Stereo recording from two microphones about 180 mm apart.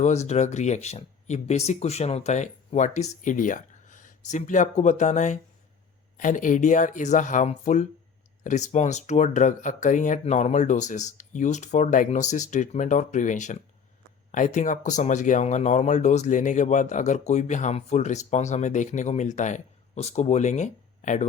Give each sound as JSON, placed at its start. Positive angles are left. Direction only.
{"t": 0.0, "sound": "speech", "side_deg": 40}